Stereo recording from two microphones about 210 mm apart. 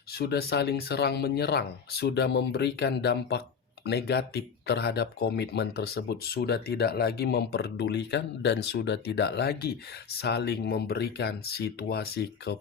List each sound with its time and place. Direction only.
0.1 s speech: 50° left (ahead or behind)